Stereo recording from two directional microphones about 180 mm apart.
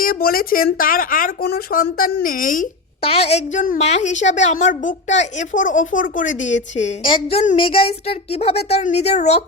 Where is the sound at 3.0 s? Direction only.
35° left (ahead or behind).